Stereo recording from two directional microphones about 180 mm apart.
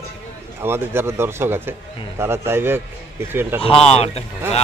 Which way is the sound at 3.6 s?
30° left (ahead or behind).